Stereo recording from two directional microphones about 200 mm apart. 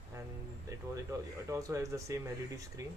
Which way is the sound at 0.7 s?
15° right (ahead or behind).